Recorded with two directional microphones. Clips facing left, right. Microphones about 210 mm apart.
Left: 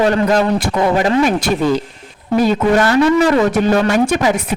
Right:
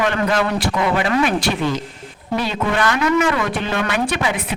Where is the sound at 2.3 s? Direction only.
45° left (ahead or behind).